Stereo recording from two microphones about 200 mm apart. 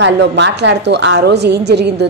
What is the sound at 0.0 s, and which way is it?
A woman's voice, 60° right (ahead or behind).